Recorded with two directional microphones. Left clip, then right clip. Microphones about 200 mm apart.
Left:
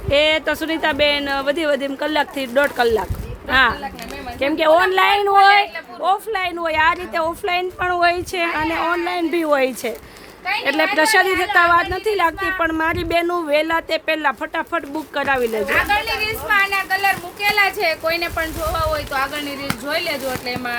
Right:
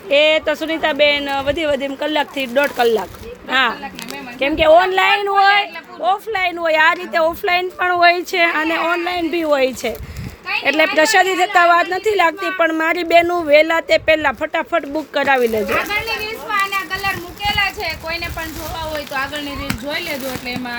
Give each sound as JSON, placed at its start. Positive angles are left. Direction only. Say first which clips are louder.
{"t": 0.1, "sound": "a woman's voice", "louder": "right 3 dB", "side_deg": 0}
{"t": 16.5, "sound": "a sound", "louder": "left 2 dB", "side_deg": 40}
{"t": 17.5, "sound": "a woman's voice", "louder": "left 2 dB", "side_deg": 45}